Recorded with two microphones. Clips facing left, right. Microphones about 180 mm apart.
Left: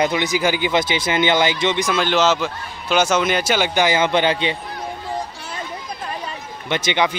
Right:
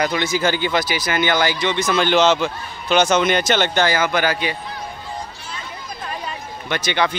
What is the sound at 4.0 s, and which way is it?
Speech, 25° left (ahead or behind).